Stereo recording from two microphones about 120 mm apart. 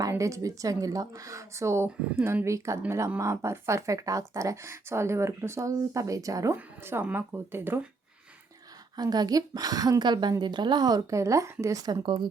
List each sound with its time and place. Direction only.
0.0 s speech: 25° right (ahead or behind)
6.6 s speech: 15° right (ahead or behind)
9.0 s a woman's voice: 35° right (ahead or behind)